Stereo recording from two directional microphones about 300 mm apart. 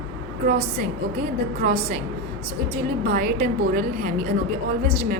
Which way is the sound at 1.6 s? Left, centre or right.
Right.